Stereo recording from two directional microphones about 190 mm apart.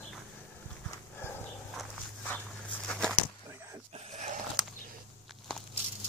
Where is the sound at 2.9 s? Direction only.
5° left (ahead or behind).